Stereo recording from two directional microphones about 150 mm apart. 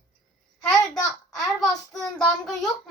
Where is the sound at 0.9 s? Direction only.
5° left (ahead or behind).